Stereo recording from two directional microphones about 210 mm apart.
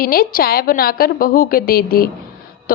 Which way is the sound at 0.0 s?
45° left (ahead or behind).